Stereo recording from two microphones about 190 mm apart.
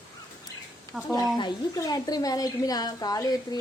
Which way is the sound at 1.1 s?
20° left (ahead or behind).